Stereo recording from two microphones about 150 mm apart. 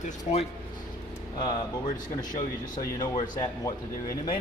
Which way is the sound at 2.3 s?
25° left (ahead or behind).